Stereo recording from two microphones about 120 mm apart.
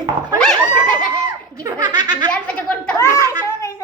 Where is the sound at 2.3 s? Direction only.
10° left (ahead or behind).